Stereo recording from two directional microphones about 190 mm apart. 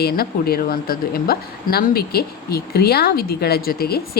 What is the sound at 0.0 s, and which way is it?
A woman's voice, 55° left (ahead or behind).